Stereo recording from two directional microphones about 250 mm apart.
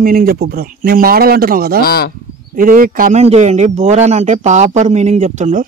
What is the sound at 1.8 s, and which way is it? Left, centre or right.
Speech, left.